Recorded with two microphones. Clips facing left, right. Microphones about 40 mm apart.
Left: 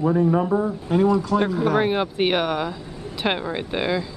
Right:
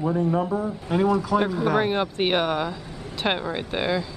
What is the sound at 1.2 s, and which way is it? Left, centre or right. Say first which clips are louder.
A man's voice: left 2 dB; centre.